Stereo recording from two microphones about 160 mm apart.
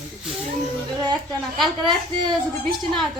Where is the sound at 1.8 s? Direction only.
30° right (ahead or behind).